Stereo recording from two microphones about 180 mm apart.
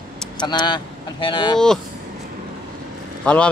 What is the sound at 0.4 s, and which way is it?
Speech, 25° left (ahead or behind).